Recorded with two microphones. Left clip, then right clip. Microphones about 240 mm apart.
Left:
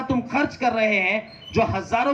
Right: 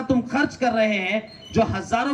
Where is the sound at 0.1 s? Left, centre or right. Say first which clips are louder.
Right 2 dB; centre.